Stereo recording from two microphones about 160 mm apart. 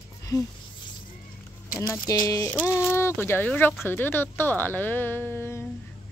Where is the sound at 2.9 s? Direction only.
15° left (ahead or behind).